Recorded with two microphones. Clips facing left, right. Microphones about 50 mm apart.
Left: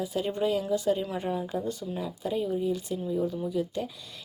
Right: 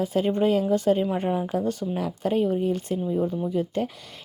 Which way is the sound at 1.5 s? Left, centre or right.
Right.